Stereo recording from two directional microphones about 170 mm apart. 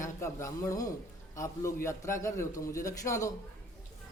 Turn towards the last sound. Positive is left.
turn(degrees=20)  # may be behind; listen again after turning